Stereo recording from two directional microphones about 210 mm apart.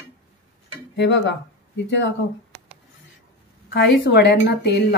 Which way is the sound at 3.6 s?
50° left (ahead or behind).